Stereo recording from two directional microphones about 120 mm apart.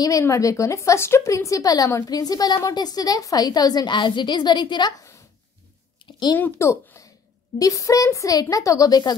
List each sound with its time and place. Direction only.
0.0 s a woman's voice: 25° left (ahead or behind)
5.9 s a sound: 40° left (ahead or behind)
6.3 s a woman's voice: 20° left (ahead or behind)